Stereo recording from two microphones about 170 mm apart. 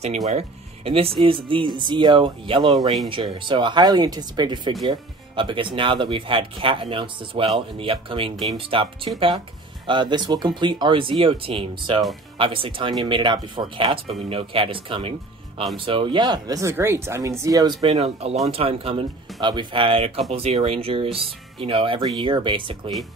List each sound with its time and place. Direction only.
0.0 s speech: 40° right (ahead or behind); by 17.9 s 25° right (ahead or behind)
17.9 s speech: 40° right (ahead or behind)